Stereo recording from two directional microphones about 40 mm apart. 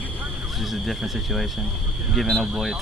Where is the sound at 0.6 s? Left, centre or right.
Centre.